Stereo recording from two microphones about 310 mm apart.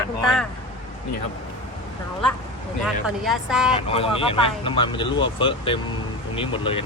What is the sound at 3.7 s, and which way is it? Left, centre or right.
Speech, centre.